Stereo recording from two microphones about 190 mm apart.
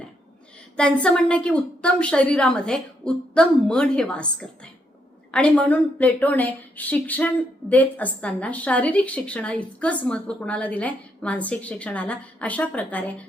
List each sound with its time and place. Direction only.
0.8 s a woman's voice: 5° left (ahead or behind)